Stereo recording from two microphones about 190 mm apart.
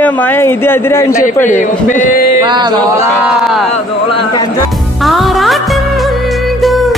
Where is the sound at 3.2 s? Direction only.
Centre (ahead or behind).